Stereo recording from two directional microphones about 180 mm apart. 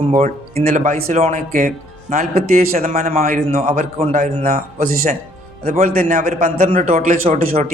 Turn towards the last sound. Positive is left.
turn(degrees=-50)  # may be behind; listen again after turning